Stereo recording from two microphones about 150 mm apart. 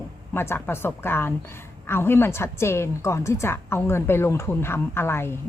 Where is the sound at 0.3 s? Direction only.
15° left (ahead or behind).